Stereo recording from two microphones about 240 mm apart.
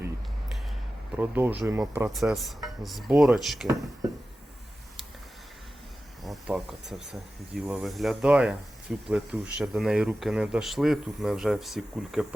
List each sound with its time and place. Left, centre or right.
1.1 s speech: centre
6.2 s speech: centre